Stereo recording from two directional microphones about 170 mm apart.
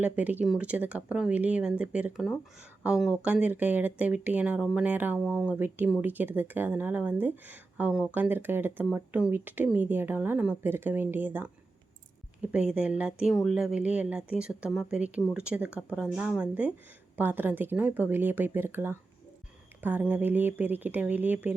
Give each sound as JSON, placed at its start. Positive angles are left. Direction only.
{"t": 0.0, "sound": "speech", "side_deg": -10}